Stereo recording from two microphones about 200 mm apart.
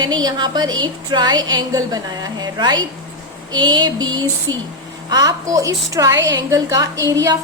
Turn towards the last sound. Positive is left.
turn(degrees=-20)  # may be behind; listen again after turning